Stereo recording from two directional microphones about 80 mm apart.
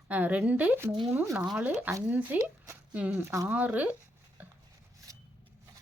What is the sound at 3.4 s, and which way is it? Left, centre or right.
Speech, centre.